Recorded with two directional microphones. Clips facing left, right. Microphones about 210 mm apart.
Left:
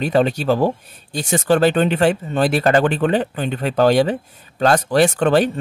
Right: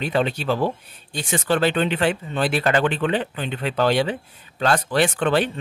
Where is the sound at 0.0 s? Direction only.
45° left (ahead or behind).